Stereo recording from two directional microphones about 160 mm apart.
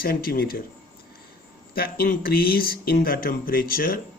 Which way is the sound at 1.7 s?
70° left (ahead or behind).